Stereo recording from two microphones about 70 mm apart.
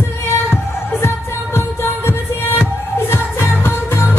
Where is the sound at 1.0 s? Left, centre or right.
Left.